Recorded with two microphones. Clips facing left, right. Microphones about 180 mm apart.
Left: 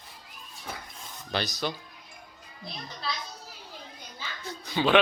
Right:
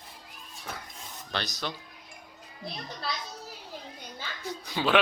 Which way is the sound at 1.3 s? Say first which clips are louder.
Left 4 dB; 5° left (ahead or behind).